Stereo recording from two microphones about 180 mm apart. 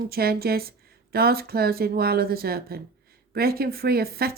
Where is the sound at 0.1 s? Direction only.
60° right (ahead or behind).